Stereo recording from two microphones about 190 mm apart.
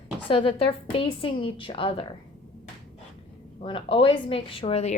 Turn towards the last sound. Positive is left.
turn(degrees=30)  # may be behind; listen again after turning